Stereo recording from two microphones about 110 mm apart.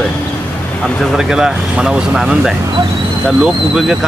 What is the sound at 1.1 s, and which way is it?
Speech, 5° right (ahead or behind).